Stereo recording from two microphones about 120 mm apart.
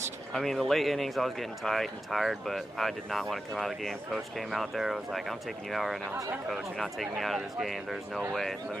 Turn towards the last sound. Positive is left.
turn(degrees=0)  # may be behind; listen again after turning